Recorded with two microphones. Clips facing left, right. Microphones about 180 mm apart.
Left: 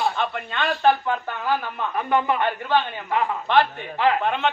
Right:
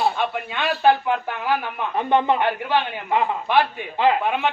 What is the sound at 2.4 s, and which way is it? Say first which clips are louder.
A man's voice: right 1 dB; 10° right (ahead or behind).